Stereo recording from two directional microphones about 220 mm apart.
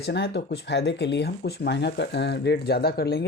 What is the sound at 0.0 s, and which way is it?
Speech, 50° left (ahead or behind).